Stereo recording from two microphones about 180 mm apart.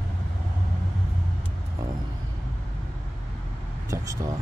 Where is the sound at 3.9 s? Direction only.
15° right (ahead or behind).